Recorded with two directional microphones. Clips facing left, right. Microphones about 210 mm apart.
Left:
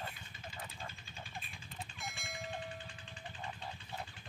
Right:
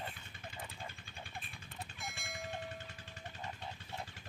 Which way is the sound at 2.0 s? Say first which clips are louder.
Even; centre (ahead or behind).